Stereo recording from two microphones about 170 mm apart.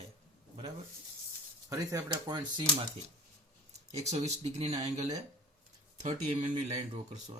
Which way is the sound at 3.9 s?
40° right (ahead or behind).